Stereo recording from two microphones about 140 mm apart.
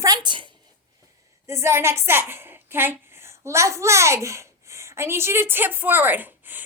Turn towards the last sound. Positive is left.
turn(degrees=-15)  # may be behind; listen again after turning